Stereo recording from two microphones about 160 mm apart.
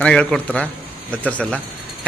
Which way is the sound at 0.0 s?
5° left (ahead or behind).